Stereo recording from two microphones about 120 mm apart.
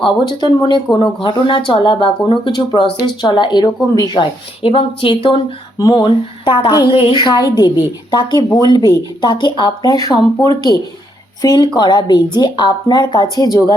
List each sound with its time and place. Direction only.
0.0 s speech: 40° left (ahead or behind)
5.7 s speech: 30° left (ahead or behind)
6.9 s a woman's voice: 55° left (ahead or behind)
7.3 s a woman's voice: 35° left (ahead or behind)